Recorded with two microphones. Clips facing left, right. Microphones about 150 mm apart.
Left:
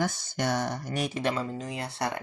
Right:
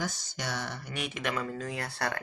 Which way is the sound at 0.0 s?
55° left (ahead or behind).